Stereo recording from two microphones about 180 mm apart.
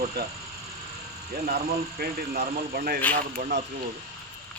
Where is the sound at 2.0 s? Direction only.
60° right (ahead or behind).